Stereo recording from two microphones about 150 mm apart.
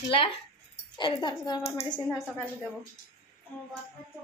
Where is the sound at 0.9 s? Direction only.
30° left (ahead or behind).